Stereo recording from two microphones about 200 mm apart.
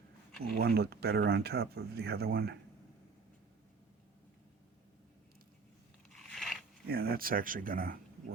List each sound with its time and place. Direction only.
0.6 s speech: 50° right (ahead or behind)
6.3 s zipper: centre (ahead or behind)
6.8 s speech: 50° right (ahead or behind)